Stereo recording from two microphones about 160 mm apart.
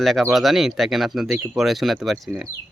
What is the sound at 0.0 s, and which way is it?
Speech, centre (ahead or behind).